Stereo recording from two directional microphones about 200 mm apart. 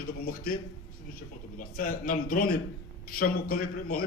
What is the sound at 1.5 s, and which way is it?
A man's voice, 45° left (ahead or behind).